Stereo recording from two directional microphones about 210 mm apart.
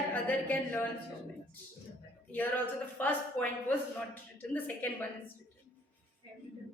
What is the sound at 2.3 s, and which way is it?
A man's voice, 10° left (ahead or behind).